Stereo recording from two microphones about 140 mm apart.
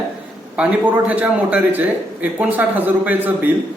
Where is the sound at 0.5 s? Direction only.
10° right (ahead or behind).